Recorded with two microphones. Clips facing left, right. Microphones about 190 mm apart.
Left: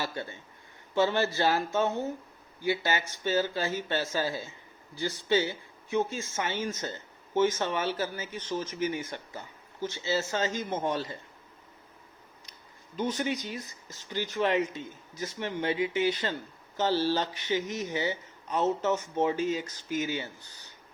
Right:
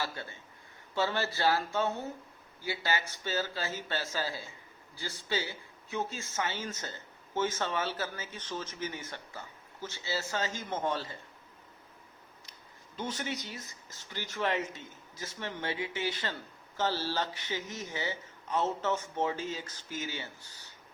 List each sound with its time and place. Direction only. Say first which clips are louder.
0.0 s a man's voice: left 3 dB; 15° left (ahead or behind)
13.0 s a man's voice: left 7 dB; 15° left (ahead or behind)